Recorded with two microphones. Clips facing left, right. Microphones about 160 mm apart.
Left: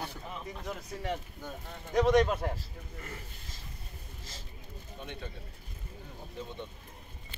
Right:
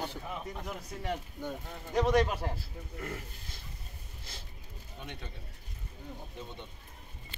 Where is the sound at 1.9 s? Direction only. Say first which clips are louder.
Left 2 dB; 5° right (ahead or behind).